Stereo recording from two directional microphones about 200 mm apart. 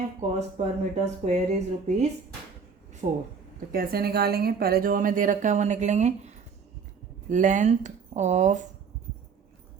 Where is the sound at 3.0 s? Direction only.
30° right (ahead or behind).